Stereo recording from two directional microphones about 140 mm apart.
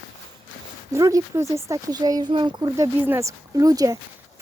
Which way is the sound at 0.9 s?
20° right (ahead or behind).